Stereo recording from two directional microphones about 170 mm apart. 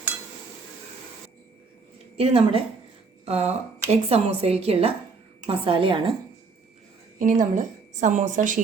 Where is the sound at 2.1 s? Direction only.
35° right (ahead or behind).